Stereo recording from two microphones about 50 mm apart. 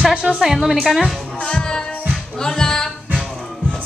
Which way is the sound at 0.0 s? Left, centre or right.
Right.